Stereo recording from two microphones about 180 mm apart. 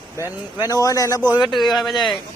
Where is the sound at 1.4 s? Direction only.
Centre (ahead or behind).